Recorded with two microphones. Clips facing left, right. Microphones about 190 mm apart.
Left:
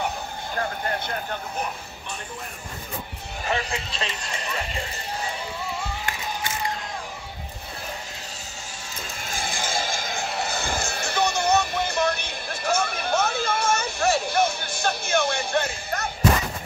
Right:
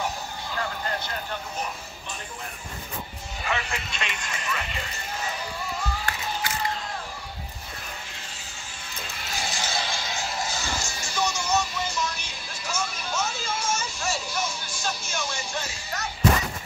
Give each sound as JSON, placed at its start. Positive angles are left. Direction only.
{"t": 0.0, "sound": "music", "side_deg": 50}
{"t": 3.4, "sound": "speech", "side_deg": 35}
{"t": 9.3, "sound": "music", "side_deg": 50}